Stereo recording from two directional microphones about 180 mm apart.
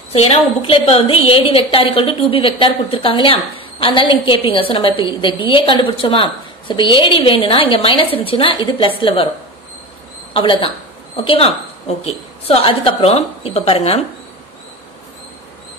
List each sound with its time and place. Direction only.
0.1 s a woman's voice: 35° left (ahead or behind)
10.3 s a woman's voice: 30° left (ahead or behind)